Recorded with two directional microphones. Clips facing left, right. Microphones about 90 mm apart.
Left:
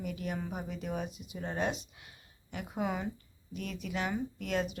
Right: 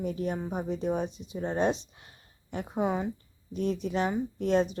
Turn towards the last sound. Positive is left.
turn(degrees=-35)  # may be behind; listen again after turning